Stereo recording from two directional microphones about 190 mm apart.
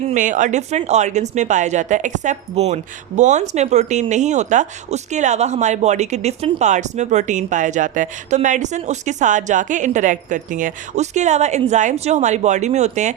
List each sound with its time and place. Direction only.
0.1 s speech: 40° right (ahead or behind)